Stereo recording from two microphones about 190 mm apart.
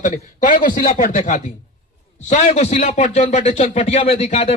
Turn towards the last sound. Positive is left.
turn(degrees=35)  # may be behind; listen again after turning